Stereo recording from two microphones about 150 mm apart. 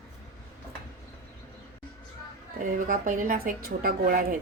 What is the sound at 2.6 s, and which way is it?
A woman's voice, 65° right (ahead or behind).